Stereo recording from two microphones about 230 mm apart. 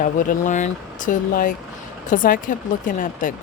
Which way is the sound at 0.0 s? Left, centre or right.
Left.